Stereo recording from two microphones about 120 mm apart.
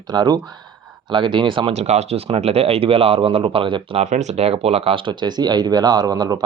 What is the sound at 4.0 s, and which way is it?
Speech, 75° right (ahead or behind).